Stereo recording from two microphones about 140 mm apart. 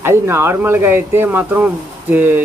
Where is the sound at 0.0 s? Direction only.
20° right (ahead or behind).